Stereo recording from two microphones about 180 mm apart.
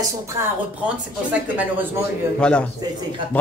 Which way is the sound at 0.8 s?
10° right (ahead or behind).